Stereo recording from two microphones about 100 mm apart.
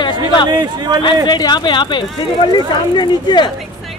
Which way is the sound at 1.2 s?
45° left (ahead or behind).